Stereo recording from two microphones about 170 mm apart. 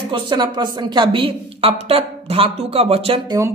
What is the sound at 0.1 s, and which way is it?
A woman's voice, 25° right (ahead or behind).